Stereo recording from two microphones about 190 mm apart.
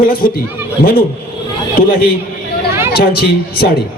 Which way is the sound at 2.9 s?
55° left (ahead or behind).